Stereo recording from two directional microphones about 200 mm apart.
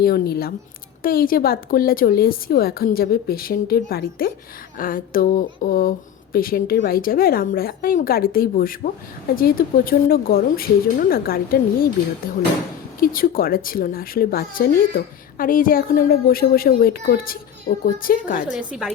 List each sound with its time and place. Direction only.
0.0 s speech: 50° left (ahead or behind)
18.7 s a woman's voice: 5° right (ahead or behind)